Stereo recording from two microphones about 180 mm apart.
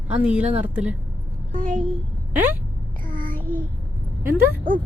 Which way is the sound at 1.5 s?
45° right (ahead or behind).